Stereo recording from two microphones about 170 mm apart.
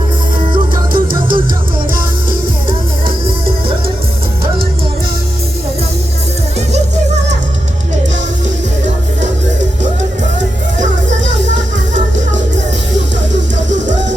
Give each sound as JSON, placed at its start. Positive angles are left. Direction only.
{"t": 0.5, "sound": "music", "side_deg": -30}